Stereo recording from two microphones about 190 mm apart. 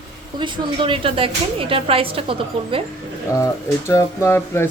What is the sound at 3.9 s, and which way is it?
Speech, 15° left (ahead or behind).